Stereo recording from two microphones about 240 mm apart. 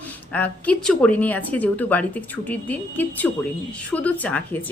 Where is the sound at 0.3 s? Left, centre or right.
Centre.